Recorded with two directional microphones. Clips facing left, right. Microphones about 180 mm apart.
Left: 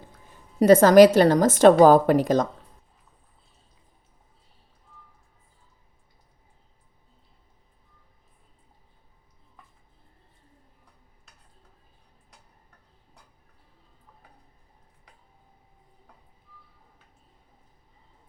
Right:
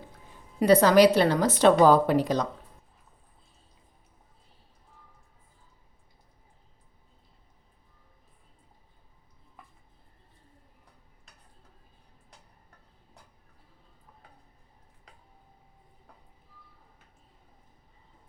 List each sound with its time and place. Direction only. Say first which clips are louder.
0.6 s a woman's voice: left 5 dB; 45° left (ahead or behind)